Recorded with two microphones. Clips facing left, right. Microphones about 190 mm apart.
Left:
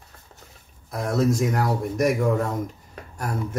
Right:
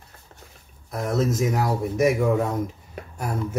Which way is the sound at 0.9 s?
Centre (ahead or behind).